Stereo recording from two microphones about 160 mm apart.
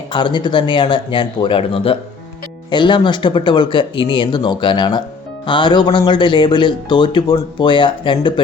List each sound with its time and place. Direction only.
0.1 s speech: 30° left (ahead or behind)